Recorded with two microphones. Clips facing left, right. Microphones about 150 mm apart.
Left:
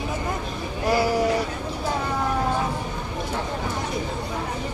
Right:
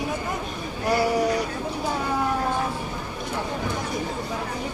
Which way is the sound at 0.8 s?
Centre (ahead or behind).